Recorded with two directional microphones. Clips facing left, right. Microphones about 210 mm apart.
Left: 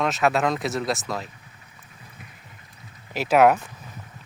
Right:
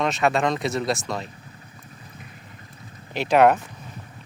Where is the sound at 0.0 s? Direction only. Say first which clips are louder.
Even; centre (ahead or behind).